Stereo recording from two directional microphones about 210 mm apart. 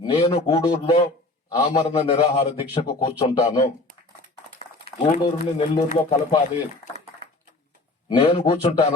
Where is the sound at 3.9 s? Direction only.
45° right (ahead or behind).